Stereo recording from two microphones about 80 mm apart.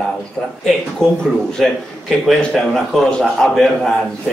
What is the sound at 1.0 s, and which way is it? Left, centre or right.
Speech, centre.